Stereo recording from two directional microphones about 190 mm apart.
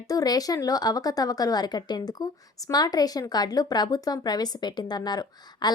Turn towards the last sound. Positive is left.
turn(degrees=20)  # may be behind; listen again after turning